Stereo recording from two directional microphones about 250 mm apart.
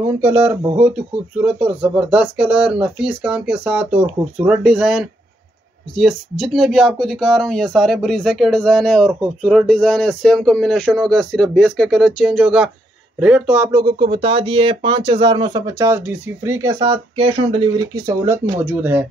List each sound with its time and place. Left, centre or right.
0.2 s speech: centre